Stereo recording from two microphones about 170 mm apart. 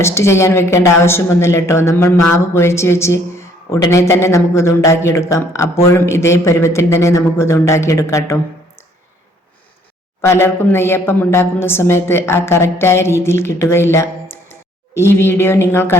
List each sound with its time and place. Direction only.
0.0 s a woman's voice: 15° left (ahead or behind)
10.2 s a woman's voice: 15° left (ahead or behind)